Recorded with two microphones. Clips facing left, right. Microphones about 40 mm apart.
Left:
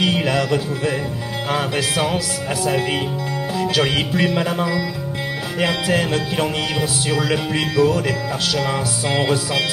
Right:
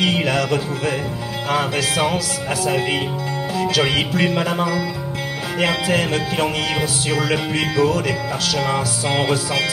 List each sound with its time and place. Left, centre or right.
0.0 s music: centre
1.5 s music: centre
3.8 s music: centre
5.9 s music: right